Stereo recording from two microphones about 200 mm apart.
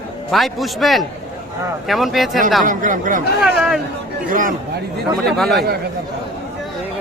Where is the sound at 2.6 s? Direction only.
40° right (ahead or behind).